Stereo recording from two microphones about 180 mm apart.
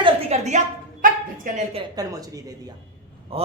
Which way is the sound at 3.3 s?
30° right (ahead or behind).